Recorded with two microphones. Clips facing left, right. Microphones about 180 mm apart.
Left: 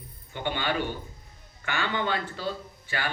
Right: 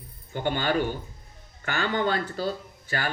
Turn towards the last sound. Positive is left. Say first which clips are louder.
# right 2 dB
turn(degrees=-40)  # may be behind; listen again after turning